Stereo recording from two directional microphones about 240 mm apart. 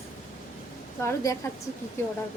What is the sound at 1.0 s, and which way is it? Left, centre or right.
Speech, centre.